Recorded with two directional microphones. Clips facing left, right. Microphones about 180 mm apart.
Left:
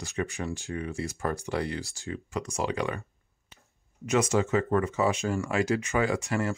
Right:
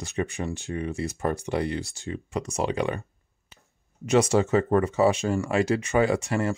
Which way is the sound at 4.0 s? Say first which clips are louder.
Right 4 dB; 30° right (ahead or behind).